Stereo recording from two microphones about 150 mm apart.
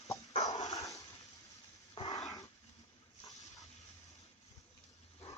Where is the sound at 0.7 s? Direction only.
20° left (ahead or behind).